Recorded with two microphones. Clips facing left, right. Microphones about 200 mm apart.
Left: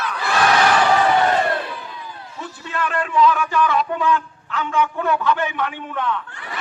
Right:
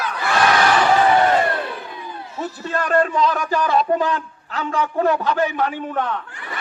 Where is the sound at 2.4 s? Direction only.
40° right (ahead or behind).